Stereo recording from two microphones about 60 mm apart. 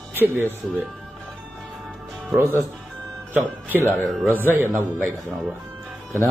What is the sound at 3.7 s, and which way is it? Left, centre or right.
Speech, left.